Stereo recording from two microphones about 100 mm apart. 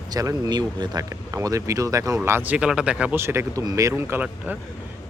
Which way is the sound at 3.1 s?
25° right (ahead or behind).